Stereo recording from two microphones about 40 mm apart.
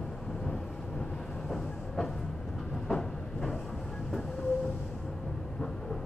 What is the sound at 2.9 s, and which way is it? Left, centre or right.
Train, centre.